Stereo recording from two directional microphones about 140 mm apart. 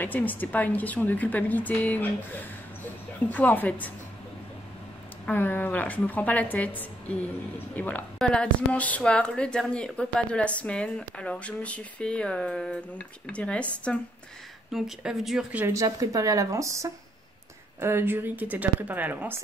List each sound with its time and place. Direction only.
0.0 s a woman's voice: 10° left (ahead or behind)
3.3 s a woman's voice: 10° left (ahead or behind)
5.2 s a woman's voice: 15° left (ahead or behind); by 15.6 s centre (ahead or behind)
15.6 s speech: 20° right (ahead or behind)